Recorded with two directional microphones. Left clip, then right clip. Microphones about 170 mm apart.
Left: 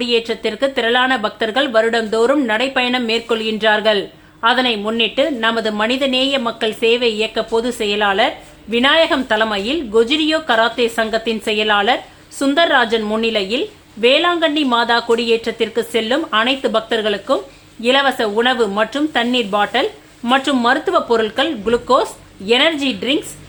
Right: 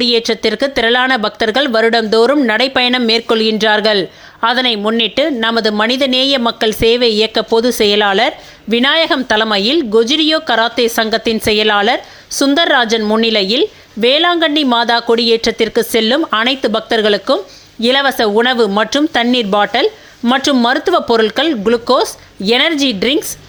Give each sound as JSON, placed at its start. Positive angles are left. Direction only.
{"t": 0.0, "sound": "speech", "side_deg": -35}